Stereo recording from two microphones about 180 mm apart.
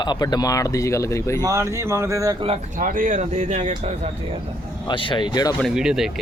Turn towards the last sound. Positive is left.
turn(degrees=-5)  # may be behind; listen again after turning